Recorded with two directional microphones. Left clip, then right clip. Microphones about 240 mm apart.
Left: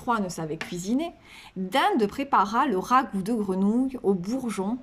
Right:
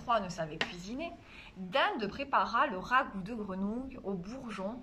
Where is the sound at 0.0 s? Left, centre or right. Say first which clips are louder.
Left 4 dB; left.